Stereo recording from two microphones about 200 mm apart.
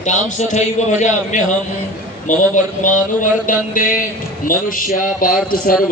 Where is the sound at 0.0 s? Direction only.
35° left (ahead or behind).